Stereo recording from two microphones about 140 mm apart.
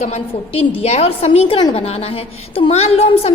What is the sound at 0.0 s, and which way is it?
A woman's voice, 45° left (ahead or behind).